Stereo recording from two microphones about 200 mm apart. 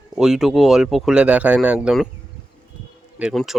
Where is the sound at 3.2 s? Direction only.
5° right (ahead or behind).